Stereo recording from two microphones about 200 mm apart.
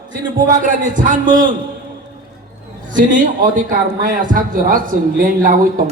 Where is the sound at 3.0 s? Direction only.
40° right (ahead or behind).